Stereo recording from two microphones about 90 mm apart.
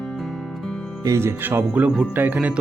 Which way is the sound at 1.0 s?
35° right (ahead or behind).